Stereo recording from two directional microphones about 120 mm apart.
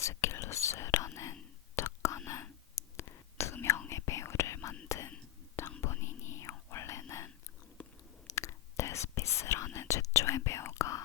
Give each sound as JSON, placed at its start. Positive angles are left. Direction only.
{"t": 0.0, "sound": "whispering", "side_deg": 25}
{"t": 7.8, "sound": "chewing", "side_deg": 15}
{"t": 8.4, "sound": "whispering", "side_deg": 20}